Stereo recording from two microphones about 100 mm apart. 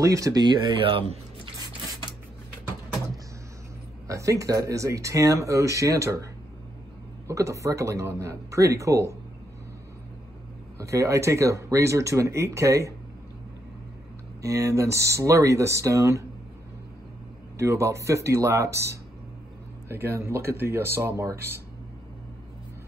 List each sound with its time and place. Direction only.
0.0 s speech: 35° right (ahead or behind); by 1.5 s 65° right (ahead or behind)
4.1 s speech: 30° right (ahead or behind)
7.2 s speech: 30° right (ahead or behind)
10.8 s speech: 30° right (ahead or behind)
14.4 s speech: 30° right (ahead or behind)
17.6 s speech: 30° right (ahead or behind)